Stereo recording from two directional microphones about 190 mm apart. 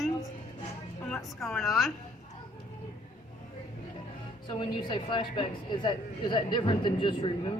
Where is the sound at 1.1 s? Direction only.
5° left (ahead or behind).